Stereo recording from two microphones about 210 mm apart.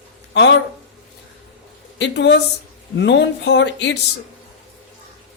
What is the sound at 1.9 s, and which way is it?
Speech, 55° left (ahead or behind).